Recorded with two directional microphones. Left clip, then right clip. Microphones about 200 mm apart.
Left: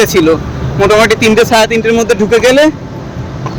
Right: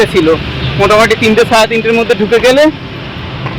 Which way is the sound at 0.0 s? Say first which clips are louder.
Even; 20° left (ahead or behind).